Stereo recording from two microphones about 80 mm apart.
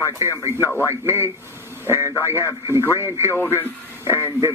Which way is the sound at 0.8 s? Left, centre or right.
Right.